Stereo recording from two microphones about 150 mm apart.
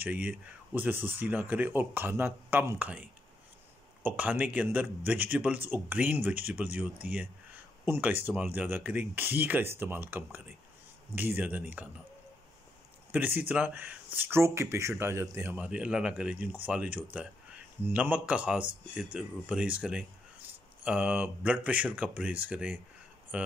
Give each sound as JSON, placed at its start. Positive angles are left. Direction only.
{"t": 0.0, "sound": "speech", "side_deg": -10}
{"t": 13.1, "sound": "speech", "side_deg": -15}